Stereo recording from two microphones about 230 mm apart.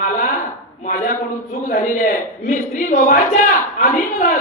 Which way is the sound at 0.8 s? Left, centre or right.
Left.